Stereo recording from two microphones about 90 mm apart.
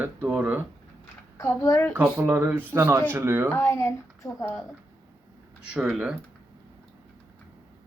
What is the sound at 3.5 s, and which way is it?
Speech, 30° left (ahead or behind).